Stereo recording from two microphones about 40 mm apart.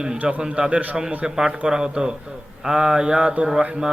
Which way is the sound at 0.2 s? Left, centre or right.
Right.